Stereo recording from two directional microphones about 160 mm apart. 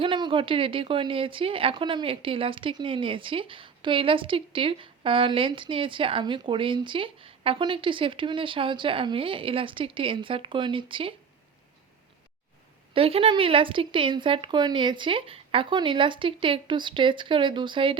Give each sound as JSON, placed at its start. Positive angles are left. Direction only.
{"t": 0.0, "sound": "speech", "side_deg": -30}
{"t": 12.9, "sound": "speech", "side_deg": -35}